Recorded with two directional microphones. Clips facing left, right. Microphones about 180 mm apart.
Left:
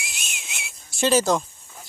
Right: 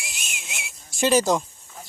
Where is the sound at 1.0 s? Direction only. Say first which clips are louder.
Even; 15° right (ahead or behind).